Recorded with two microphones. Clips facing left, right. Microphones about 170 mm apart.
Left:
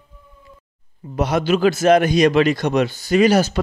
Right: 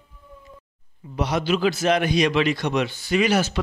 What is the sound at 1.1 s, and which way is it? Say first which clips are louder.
A man's voice: left 4 dB; 50° left (ahead or behind).